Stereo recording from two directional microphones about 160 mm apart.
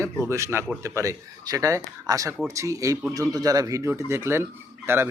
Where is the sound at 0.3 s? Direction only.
15° right (ahead or behind).